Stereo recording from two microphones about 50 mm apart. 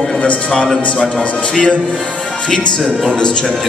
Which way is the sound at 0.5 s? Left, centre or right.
Centre.